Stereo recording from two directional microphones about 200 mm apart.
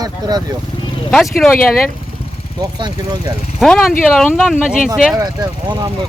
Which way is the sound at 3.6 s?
Centre (ahead or behind).